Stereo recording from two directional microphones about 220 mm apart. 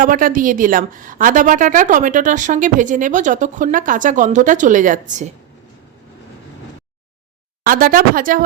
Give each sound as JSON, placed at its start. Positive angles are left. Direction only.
{"t": 0.0, "sound": "a woman's voice", "side_deg": -40}
{"t": 7.6, "sound": "a woman's voice", "side_deg": -40}